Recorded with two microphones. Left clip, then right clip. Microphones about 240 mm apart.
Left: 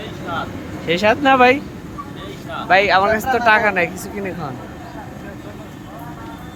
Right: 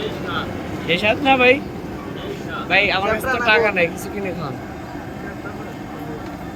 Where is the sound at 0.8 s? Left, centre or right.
Centre.